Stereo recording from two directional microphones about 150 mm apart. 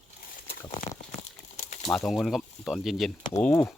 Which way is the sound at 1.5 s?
55° left (ahead or behind).